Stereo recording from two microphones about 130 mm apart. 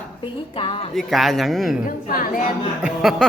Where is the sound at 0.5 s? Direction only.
45° left (ahead or behind).